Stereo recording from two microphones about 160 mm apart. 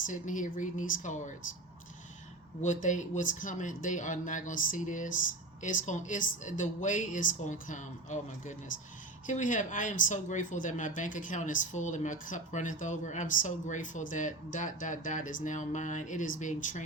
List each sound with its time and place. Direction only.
0.0 s speech: 55° left (ahead or behind)
2.6 s speech: 50° left (ahead or behind)